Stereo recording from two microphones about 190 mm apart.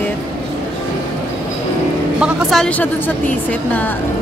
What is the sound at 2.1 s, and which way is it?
A woman's voice, centre (ahead or behind).